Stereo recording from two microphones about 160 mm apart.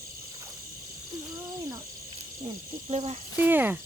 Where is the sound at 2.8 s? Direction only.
40° right (ahead or behind).